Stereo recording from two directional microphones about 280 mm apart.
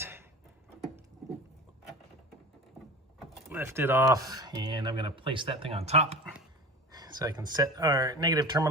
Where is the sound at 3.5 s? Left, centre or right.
Centre.